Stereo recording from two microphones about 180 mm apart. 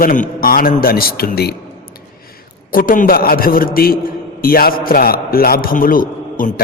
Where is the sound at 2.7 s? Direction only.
50° left (ahead or behind).